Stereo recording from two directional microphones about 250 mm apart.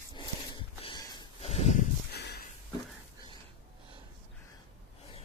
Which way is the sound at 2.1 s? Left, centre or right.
Left.